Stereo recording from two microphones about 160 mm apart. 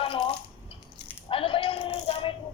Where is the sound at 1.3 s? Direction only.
35° left (ahead or behind).